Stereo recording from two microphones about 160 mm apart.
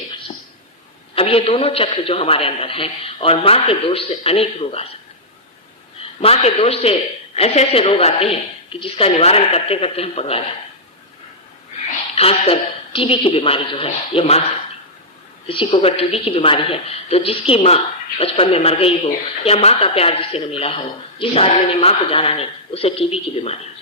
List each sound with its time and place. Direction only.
1.1 s speech: 35° left (ahead or behind)
6.2 s speech: 40° left (ahead or behind)
12.1 s speech: 40° left (ahead or behind)
15.4 s speech: 35° left (ahead or behind)